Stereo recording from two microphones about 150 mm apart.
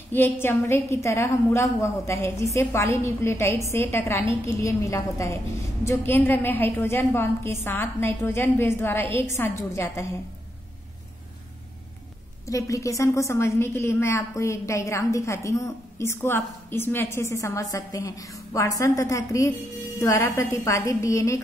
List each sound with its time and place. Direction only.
0.1 s a woman's voice: 15° left (ahead or behind)
12.4 s a woman's voice: 20° left (ahead or behind)